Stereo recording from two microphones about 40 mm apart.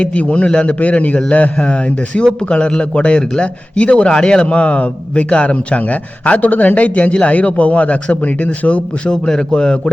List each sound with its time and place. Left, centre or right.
0.0 s a man's voice: left
9.0 s a man's voice: centre